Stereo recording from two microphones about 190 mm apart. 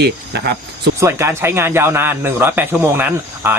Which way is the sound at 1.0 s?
15° right (ahead or behind).